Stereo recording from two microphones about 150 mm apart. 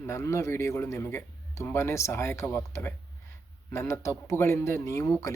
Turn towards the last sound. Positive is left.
turn(degrees=20)  # may be behind; listen again after turning